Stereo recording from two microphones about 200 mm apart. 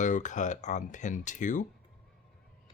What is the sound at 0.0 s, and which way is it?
Speech, 40° left (ahead or behind).